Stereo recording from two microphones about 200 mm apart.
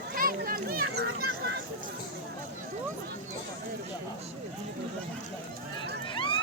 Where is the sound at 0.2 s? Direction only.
45° right (ahead or behind).